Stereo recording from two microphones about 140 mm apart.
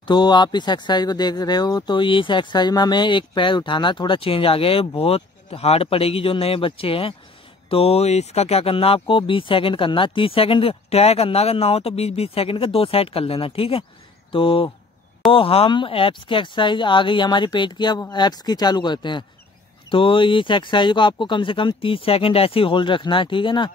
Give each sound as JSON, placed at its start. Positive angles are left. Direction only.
{"t": 0.0, "sound": "speech", "side_deg": 35}